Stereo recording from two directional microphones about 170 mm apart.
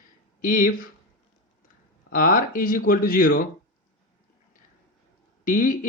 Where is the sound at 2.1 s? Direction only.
55° left (ahead or behind).